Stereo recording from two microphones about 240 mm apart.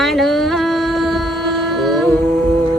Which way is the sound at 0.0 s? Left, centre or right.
Centre.